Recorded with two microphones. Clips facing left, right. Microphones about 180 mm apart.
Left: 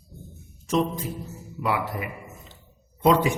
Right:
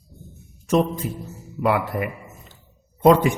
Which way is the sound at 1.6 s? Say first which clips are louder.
Right 6 dB; 55° right (ahead or behind).